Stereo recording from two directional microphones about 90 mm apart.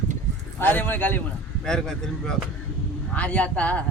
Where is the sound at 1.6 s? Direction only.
5° left (ahead or behind).